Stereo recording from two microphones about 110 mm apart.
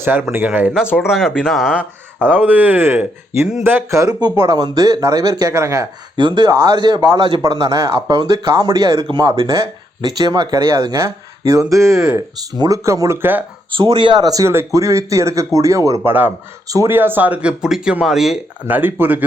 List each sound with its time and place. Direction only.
0.0 s speech: 15° right (ahead or behind)
0.9 s speech: 20° left (ahead or behind)
1.1 s speech: 5° right (ahead or behind); by 5.9 s 30° right (ahead or behind)
6.1 s speech: 45° right (ahead or behind)
7.4 s speech: 30° right (ahead or behind)
9.0 s speech: 40° right (ahead or behind)
10.6 s speech: 25° right (ahead or behind)
13.9 s speech: 45° right (ahead or behind); by 16.9 s 30° right (ahead or behind)
16.9 s speech: 20° right (ahead or behind); by 18.3 s 5° right (ahead or behind)
18.7 s speech: 20° right (ahead or behind)